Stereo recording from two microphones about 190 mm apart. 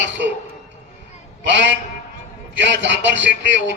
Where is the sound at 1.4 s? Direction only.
70° right (ahead or behind).